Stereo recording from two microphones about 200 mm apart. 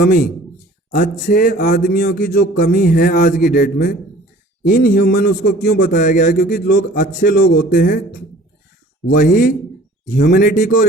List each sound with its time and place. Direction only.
0.0 s speech: 50° left (ahead or behind)
6.3 s speech: 55° left (ahead or behind)
9.1 s speech: 50° left (ahead or behind)